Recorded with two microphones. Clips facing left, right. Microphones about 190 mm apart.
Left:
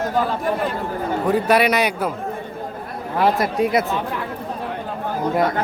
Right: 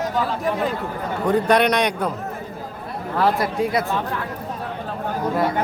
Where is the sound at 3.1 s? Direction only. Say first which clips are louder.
Left 2 dB; 20° left (ahead or behind).